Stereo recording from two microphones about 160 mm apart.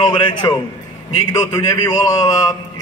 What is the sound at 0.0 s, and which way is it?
Speech, 30° left (ahead or behind).